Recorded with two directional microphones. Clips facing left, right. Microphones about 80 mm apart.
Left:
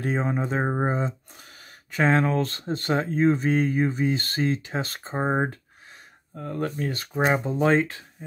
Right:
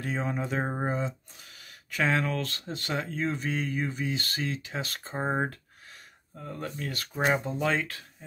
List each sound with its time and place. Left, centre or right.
0.0 s speech: left
0.4 s speech: left
5.2 s a sound: left
6.3 s speech: left
6.8 s speech: left
8.2 s speech: centre